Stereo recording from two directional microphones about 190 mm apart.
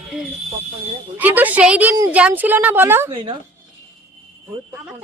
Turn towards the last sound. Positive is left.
turn(degrees=-25)  # may be behind; listen again after turning